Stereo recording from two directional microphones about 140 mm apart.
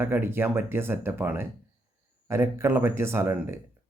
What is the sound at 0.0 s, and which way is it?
Speech, 15° right (ahead or behind).